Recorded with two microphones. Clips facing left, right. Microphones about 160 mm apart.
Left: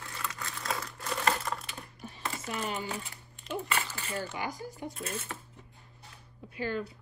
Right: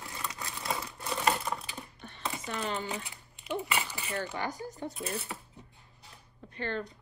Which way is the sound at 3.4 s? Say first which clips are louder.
Right 1 dB; 10° right (ahead or behind).